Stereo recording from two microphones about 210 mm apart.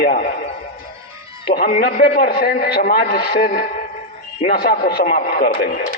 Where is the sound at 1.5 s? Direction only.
45° left (ahead or behind).